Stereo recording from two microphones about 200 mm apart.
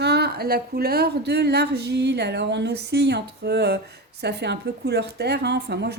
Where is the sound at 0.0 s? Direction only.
55° right (ahead or behind).